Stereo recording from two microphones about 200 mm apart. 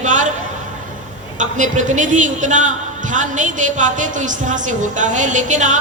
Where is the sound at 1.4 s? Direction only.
40° right (ahead or behind).